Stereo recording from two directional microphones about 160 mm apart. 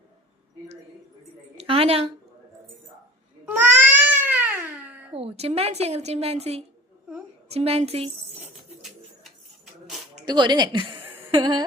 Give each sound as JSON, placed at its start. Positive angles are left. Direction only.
{"t": 1.5, "sound": "a sound", "side_deg": -35}
{"t": 3.4, "sound": "cat", "side_deg": -10}
{"t": 5.1, "sound": "a woman's voice", "side_deg": -40}
{"t": 10.2, "sound": "a woman's voice", "side_deg": -30}